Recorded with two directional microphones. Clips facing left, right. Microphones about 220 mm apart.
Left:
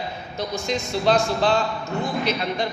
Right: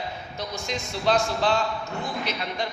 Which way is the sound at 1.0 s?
30° left (ahead or behind).